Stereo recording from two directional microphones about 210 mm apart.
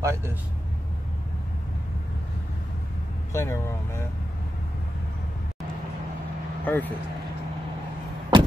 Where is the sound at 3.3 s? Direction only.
15° left (ahead or behind).